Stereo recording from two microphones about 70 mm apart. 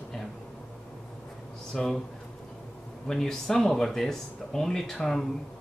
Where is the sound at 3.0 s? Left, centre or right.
Centre.